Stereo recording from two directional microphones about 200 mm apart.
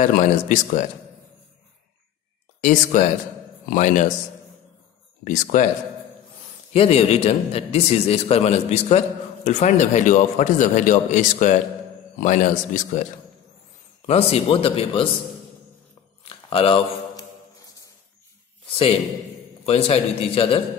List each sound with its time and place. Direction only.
0.3 s a man's voice: 35° left (ahead or behind)
2.6 s a man's voice: 40° left (ahead or behind)
5.2 s a man's voice: 40° left (ahead or behind)
6.7 s a man's voice: 30° left (ahead or behind)
14.0 s speech: 30° left (ahead or behind)
16.3 s a sound: 25° left (ahead or behind)
19.6 s speech: 30° left (ahead or behind)